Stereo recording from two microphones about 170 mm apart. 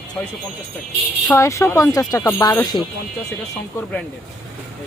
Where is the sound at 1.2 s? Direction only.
15° left (ahead or behind).